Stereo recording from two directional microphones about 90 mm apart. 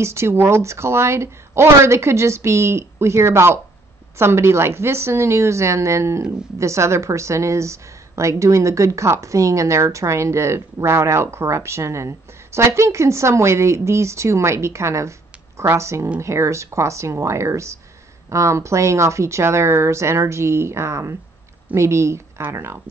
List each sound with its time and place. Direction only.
0.0 s a woman's voice: 30° right (ahead or behind)